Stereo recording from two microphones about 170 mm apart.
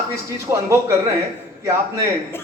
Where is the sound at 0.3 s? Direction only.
15° right (ahead or behind).